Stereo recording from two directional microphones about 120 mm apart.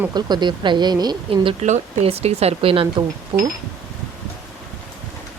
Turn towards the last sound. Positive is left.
turn(degrees=-45)  # may be behind; listen again after turning